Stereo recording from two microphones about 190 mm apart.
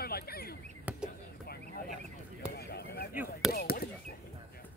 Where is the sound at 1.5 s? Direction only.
50° left (ahead or behind).